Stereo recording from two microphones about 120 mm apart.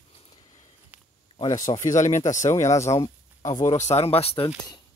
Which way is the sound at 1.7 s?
30° left (ahead or behind).